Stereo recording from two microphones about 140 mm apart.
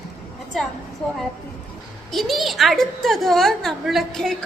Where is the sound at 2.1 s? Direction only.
Centre (ahead or behind).